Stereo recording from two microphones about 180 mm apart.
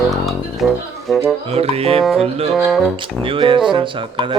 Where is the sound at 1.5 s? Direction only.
35° right (ahead or behind).